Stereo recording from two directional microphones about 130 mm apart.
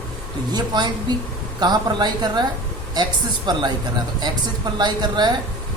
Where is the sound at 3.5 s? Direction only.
35° right (ahead or behind).